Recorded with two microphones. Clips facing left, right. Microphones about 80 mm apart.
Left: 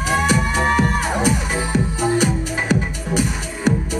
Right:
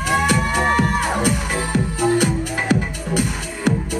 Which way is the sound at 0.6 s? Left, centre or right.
Centre.